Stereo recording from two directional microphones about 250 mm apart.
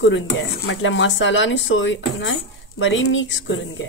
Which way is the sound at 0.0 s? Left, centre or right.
Left.